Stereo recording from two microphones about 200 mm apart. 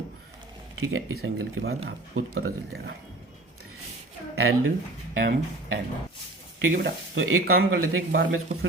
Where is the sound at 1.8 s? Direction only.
55° right (ahead or behind).